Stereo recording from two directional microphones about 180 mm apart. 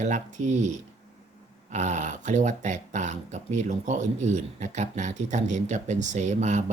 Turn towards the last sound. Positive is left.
turn(degrees=-40)  # may be behind; listen again after turning